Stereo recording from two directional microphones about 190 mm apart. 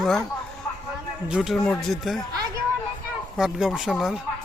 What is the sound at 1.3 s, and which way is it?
Speech, centre (ahead or behind).